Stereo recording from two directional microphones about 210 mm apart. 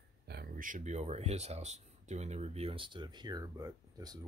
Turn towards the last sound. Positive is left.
turn(degrees=-15)  # may be behind; listen again after turning